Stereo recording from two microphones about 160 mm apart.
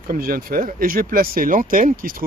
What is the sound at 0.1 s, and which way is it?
Speech, 65° right (ahead or behind).